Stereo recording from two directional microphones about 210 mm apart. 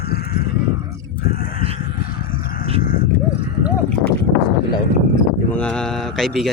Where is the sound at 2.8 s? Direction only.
45° left (ahead or behind).